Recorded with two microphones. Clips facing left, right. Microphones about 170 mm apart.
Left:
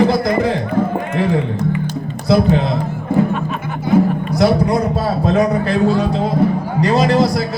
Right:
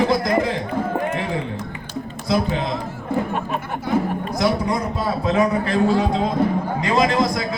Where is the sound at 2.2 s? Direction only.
40° left (ahead or behind).